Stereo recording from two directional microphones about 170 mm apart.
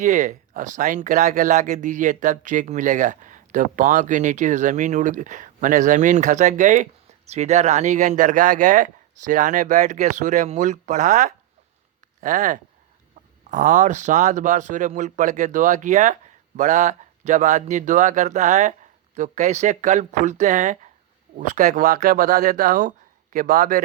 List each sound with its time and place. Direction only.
0.0 s speech: 50° right (ahead or behind)